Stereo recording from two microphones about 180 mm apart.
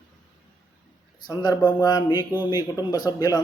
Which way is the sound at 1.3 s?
25° left (ahead or behind).